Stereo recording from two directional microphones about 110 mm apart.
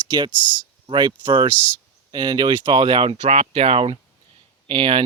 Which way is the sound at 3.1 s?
85° right.